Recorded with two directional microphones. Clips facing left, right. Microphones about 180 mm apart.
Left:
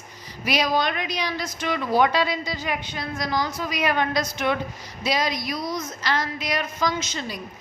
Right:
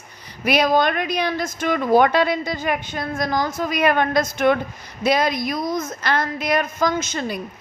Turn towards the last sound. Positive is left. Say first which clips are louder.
# right 6 dB
turn(degrees=-55)  # may be behind; listen again after turning